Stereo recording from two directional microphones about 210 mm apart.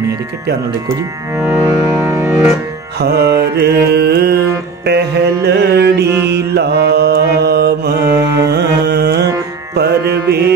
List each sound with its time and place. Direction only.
1.4 s music: 10° right (ahead or behind)
3.0 s mantra: 50° right (ahead or behind)
9.8 s music: 50° right (ahead or behind)